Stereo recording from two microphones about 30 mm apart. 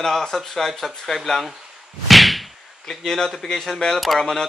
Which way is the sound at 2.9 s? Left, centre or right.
Centre.